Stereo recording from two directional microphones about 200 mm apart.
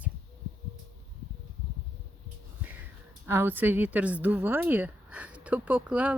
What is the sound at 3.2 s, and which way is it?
Speech, 10° right (ahead or behind).